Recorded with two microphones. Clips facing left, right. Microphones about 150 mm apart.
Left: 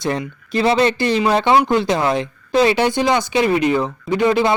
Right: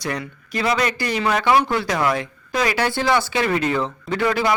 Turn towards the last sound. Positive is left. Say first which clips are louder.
# left 5 dB
turn(degrees=20)  # may be behind; listen again after turning